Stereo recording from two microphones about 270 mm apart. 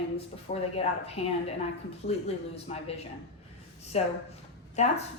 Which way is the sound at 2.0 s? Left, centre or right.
Left.